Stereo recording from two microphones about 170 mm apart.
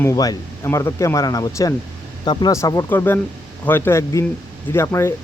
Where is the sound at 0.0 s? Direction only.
20° left (ahead or behind).